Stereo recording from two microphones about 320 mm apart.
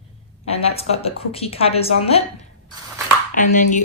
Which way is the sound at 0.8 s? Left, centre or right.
Centre.